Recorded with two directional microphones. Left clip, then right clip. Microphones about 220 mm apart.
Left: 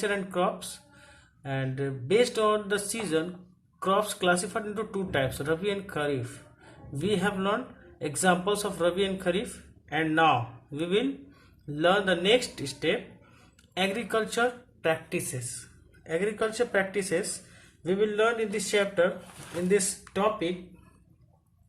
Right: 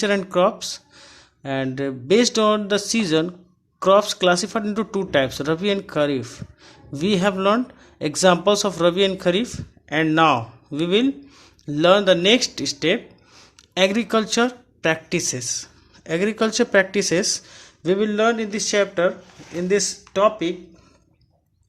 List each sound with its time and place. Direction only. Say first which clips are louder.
0.0 s speech: right 9 dB; 45° right (ahead or behind)